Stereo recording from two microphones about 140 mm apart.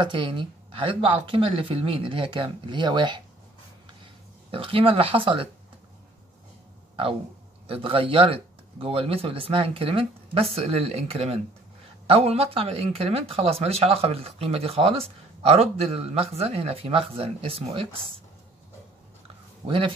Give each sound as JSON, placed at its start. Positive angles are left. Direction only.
{"t": 0.0, "sound": "speech", "side_deg": -35}
{"t": 4.5, "sound": "speech", "side_deg": -40}
{"t": 7.6, "sound": "speech", "side_deg": -40}